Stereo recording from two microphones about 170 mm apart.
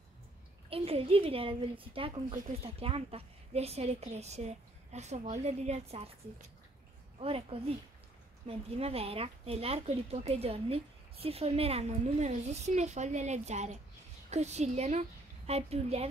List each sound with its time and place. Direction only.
0.7 s a woman's voice: 35° right (ahead or behind)